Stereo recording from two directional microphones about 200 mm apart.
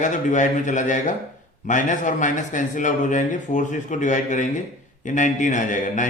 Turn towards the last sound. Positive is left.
turn(degrees=40)  # may be behind; listen again after turning